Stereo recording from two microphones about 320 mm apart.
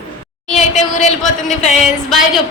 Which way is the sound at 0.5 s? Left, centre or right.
Left.